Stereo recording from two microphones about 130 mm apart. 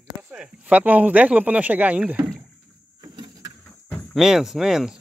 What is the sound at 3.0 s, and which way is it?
Vehicle, 30° right (ahead or behind).